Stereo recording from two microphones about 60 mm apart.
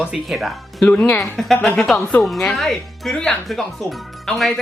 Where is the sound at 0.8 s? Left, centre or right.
Left.